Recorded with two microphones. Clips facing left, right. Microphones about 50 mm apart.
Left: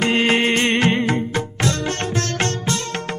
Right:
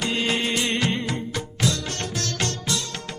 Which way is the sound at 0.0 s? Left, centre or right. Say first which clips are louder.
Left 7 dB; left.